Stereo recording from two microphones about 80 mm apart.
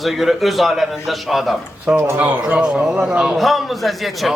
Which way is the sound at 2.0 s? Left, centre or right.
Right.